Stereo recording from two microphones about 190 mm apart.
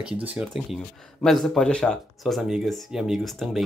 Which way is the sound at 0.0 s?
5° right (ahead or behind).